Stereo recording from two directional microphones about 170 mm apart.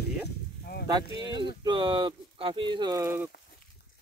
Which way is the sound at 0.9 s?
25° right (ahead or behind).